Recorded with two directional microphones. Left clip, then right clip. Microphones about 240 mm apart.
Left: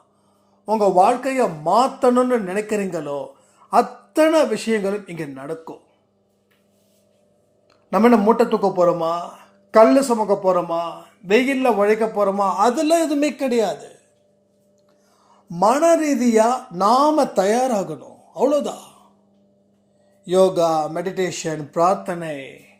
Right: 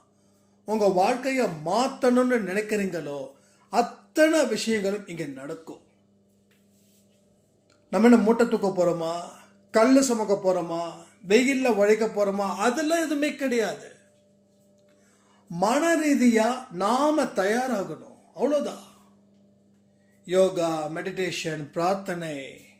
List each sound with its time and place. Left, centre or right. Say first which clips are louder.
0.6 s speech: left 7 dB; centre
7.9 s a man's voice: left 5 dB; centre
15.5 s a man's voice: left 8 dB; centre
20.2 s a man's voice: left 6 dB; left; by 22.5 s centre